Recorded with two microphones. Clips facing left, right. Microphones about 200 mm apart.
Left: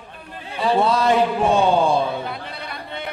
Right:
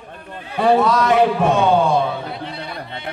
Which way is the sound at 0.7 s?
30° left (ahead or behind).